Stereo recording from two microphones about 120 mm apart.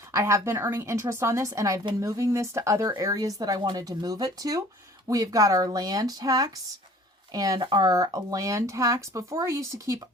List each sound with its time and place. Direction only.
0.1 s speech: 25° right (ahead or behind)